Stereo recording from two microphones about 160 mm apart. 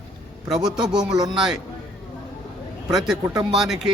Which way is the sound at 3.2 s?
25° right (ahead or behind).